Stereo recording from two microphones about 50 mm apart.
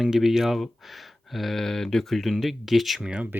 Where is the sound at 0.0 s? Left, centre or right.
Centre.